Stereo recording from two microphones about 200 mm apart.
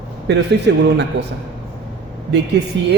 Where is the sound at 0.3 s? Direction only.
60° right (ahead or behind).